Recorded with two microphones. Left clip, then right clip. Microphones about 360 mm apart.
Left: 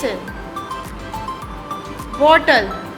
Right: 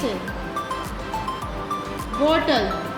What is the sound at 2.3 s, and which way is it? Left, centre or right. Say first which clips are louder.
Speech: left 8 dB; left.